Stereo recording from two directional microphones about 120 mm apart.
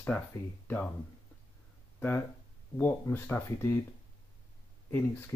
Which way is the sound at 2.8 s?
20° left (ahead or behind).